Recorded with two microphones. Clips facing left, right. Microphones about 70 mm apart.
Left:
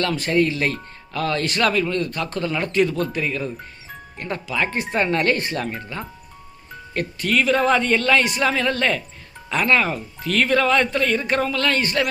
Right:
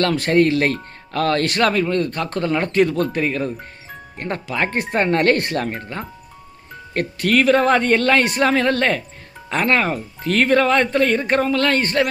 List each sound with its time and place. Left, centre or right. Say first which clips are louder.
0.0 s speech: right 4 dB; right